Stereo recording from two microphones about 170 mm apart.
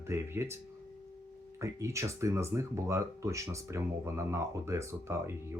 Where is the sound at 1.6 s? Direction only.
15° right (ahead or behind).